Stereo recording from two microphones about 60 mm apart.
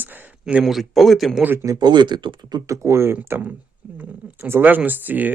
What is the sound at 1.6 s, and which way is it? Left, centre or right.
Speech, right.